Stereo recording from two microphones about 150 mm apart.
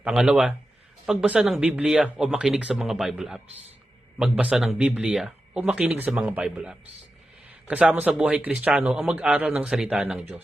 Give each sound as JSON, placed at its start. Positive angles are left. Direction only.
{"t": 0.0, "sound": "a man's voice", "side_deg": -5}